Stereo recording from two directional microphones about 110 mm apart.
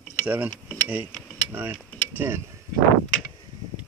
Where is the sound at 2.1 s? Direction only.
20° right (ahead or behind).